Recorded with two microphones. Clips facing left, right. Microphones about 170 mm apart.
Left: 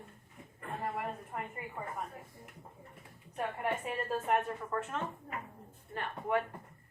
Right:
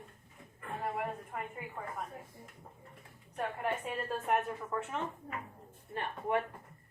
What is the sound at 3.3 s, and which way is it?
A woman's voice, centre (ahead or behind).